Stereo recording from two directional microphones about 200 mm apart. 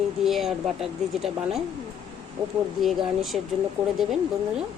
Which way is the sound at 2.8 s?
Centre (ahead or behind).